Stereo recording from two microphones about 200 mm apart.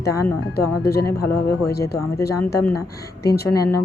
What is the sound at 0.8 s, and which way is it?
Speech, 50° left (ahead or behind).